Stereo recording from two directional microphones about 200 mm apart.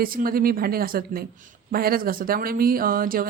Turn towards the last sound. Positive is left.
turn(degrees=-45)  # may be behind; listen again after turning